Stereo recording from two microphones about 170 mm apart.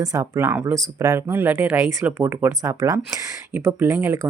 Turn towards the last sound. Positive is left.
turn(degrees=-10)  # may be behind; listen again after turning